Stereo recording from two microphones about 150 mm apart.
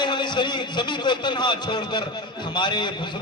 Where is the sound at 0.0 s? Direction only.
30° left (ahead or behind).